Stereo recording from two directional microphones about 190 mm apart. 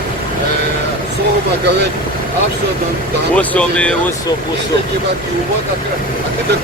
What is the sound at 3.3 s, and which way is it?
Speech, 5° left (ahead or behind).